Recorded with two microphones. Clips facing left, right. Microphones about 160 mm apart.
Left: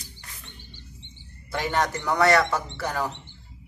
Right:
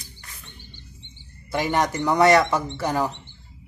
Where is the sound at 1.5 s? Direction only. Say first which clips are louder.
Right 3 dB; 15° right (ahead or behind).